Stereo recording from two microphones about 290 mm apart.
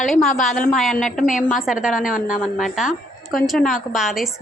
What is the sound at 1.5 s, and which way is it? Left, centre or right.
Speech, centre.